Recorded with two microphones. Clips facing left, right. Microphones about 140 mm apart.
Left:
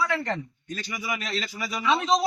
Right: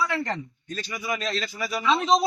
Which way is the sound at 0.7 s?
15° left (ahead or behind).